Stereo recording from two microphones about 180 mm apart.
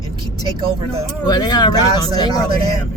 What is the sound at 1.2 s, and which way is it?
Speech, 20° left (ahead or behind).